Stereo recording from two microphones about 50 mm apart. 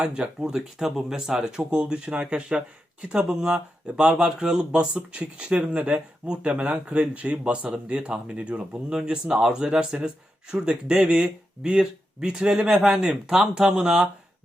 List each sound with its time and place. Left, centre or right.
0.0 s speech: right
4.9 s speech: right